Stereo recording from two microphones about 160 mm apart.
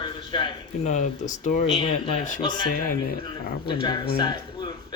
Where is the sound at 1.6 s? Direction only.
35° left (ahead or behind).